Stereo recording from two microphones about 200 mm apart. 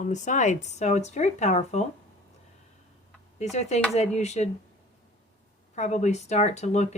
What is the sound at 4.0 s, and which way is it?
Speech, 35° left (ahead or behind).